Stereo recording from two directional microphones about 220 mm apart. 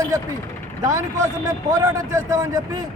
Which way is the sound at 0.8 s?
15° right (ahead or behind).